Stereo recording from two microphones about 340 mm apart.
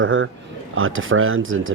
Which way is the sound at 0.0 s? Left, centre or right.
Right.